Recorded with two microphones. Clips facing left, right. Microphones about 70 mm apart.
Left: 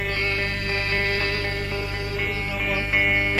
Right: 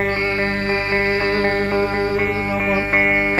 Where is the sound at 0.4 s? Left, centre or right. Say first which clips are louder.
Right 7 dB; right.